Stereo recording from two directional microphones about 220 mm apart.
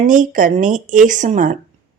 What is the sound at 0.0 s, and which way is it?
Speech, 35° right (ahead or behind).